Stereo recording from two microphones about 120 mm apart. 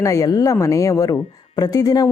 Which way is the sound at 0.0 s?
30° left (ahead or behind).